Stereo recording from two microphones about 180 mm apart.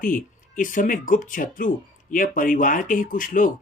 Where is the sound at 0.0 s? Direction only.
50° left (ahead or behind).